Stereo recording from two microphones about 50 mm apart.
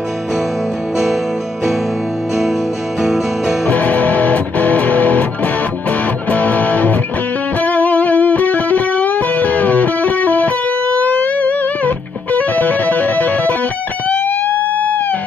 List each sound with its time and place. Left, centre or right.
3.0 s music: centre
3.6 s music: left
14.0 s guitar: left